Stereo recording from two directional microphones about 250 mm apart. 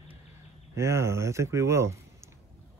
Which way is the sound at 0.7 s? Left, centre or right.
Centre.